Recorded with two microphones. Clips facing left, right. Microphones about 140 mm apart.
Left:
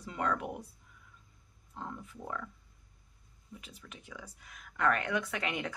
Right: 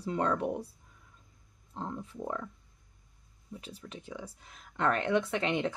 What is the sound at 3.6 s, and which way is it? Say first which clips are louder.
Speech: right 7 dB; 30° right (ahead or behind).